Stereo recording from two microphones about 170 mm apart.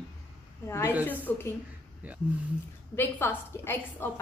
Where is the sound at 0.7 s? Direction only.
15° left (ahead or behind).